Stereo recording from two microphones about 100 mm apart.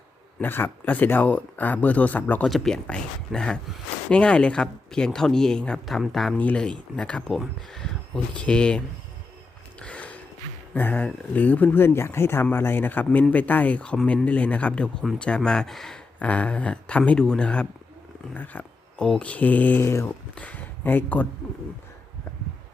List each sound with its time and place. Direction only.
0.4 s speech: 20° left (ahead or behind); by 6.3 s centre (ahead or behind)
6.3 s speech: 15° left (ahead or behind)
9.7 s a sound: 10° left (ahead or behind)
10.8 s speech: 20° left (ahead or behind)
13.1 s speech: 5° left (ahead or behind)
13.3 s speech: 15° left (ahead or behind)
18.3 s a sound: 15° left (ahead or behind)
19.0 s speech: 10° left (ahead or behind); by 20.1 s 25° left (ahead or behind)
20.3 s speech: 15° left (ahead or behind)